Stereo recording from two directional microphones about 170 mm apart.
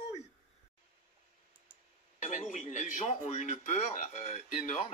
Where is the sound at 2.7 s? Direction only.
45° left (ahead or behind).